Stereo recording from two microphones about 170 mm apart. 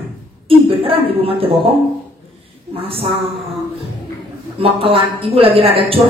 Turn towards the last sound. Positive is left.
turn(degrees=-35)  # may be behind; listen again after turning